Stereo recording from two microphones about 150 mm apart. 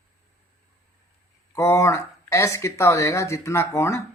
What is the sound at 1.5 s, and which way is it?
Speech, 20° left (ahead or behind).